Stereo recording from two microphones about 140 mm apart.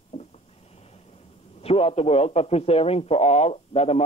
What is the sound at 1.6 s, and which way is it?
A man's voice, 45° left (ahead or behind).